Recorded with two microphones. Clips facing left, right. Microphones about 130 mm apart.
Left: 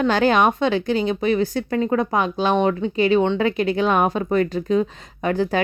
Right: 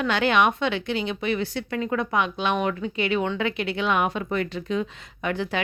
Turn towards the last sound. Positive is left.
turn(degrees=40)  # may be behind; listen again after turning